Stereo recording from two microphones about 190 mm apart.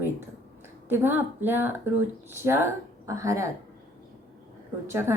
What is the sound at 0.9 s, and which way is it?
A woman's voice, 10° right (ahead or behind).